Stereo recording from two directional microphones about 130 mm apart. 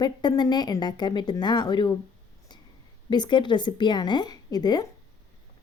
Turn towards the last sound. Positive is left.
turn(degrees=30)  # may be behind; listen again after turning